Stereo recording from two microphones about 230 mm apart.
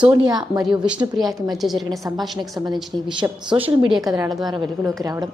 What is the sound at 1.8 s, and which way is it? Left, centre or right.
Speech, centre.